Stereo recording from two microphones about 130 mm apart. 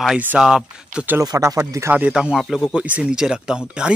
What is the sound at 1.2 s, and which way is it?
Speech, 30° right (ahead or behind).